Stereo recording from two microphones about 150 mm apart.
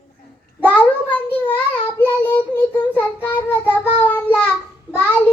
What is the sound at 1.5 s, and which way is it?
Child singing, 15° left (ahead or behind).